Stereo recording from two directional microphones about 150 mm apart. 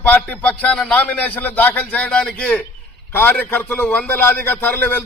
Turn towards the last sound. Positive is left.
turn(degrees=10)  # may be behind; listen again after turning